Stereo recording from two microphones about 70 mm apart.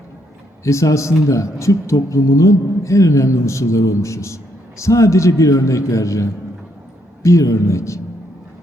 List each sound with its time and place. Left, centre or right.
0.6 s speech: left